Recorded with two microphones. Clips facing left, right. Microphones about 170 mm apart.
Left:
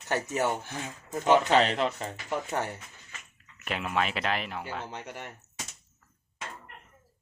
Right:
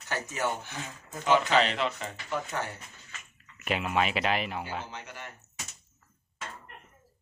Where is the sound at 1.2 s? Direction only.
40° left (ahead or behind).